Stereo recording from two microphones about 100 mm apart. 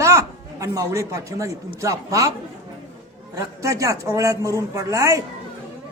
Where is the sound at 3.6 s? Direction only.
35° right (ahead or behind).